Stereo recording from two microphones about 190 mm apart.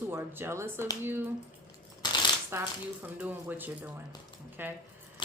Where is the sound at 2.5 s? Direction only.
10° right (ahead or behind).